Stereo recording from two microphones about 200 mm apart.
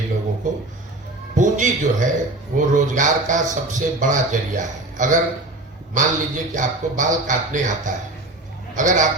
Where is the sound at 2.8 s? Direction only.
40° right (ahead or behind).